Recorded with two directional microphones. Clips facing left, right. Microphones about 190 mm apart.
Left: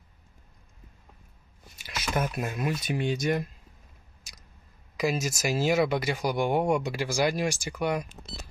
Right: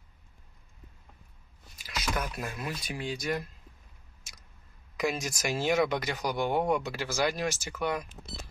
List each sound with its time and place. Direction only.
1.8 s a sound: 25° left (ahead or behind)
2.1 s speech: 25° left (ahead or behind)
4.9 s speech: centre (ahead or behind)